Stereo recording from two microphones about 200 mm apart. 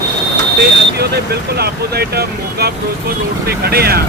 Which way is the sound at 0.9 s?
55° right (ahead or behind).